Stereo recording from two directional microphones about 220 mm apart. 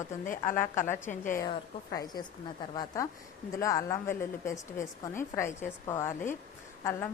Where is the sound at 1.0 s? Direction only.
35° left (ahead or behind).